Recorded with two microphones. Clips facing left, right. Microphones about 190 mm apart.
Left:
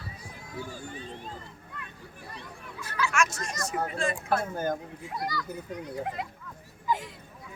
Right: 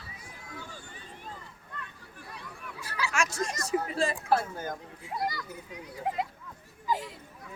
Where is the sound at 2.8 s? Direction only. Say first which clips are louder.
Left 3 dB; 35° right (ahead or behind).